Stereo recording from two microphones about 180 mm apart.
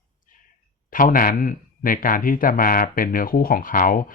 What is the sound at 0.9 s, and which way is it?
Speech, 50° left (ahead or behind).